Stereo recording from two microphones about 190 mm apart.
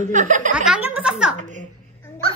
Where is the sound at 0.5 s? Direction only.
5° right (ahead or behind).